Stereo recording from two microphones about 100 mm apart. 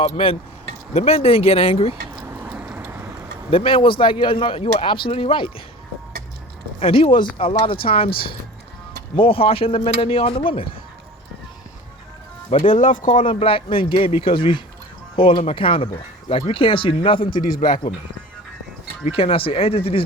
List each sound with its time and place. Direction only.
0.0 s speech: 70° left (ahead or behind)
0.9 s speech: 90° left
2.2 s vehicle: 25° right (ahead or behind)
3.5 s speech: 65° left (ahead or behind)
6.7 s speech: 75° left (ahead or behind)
7.3 s speech: 75° left (ahead or behind)
12.5 s speech: 70° left (ahead or behind)
19.0 s speech: 70° left (ahead or behind)